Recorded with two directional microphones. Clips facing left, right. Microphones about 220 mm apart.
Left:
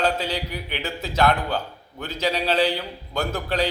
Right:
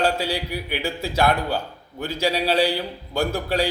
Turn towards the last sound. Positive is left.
turn(degrees=-10)  # may be behind; listen again after turning